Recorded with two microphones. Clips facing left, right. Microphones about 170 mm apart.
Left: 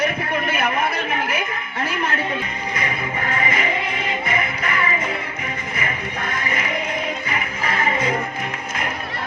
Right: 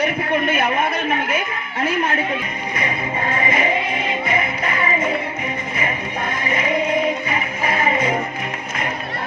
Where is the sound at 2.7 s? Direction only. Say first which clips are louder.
Right 2 dB; 25° right (ahead or behind).